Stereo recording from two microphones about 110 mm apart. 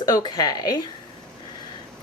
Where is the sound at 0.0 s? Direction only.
40° left (ahead or behind).